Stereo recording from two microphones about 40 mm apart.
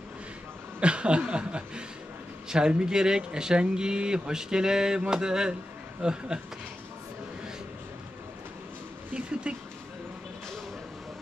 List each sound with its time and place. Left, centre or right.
0.7 s chuckle: right
2.5 s speech: centre
9.1 s a sound: right